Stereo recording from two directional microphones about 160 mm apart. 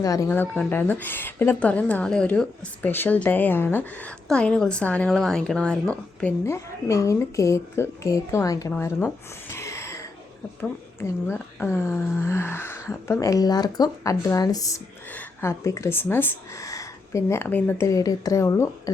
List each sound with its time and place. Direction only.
0.0 s a woman's voice: 20° left (ahead or behind)
8.7 s a sound: 10° left (ahead or behind)
10.6 s a woman's voice: 15° left (ahead or behind)